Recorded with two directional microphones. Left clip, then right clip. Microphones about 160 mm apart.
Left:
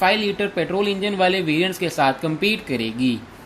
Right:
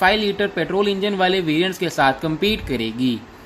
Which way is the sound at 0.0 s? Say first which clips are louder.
Right 2 dB; 20° right (ahead or behind).